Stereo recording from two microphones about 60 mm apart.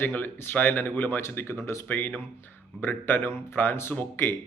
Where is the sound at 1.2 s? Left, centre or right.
Left.